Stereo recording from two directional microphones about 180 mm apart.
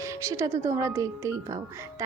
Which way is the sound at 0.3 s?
15° right (ahead or behind).